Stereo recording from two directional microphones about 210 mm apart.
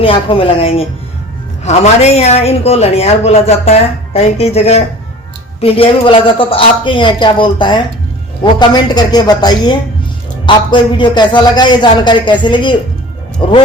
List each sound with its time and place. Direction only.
0.0 s speech: 25° left (ahead or behind)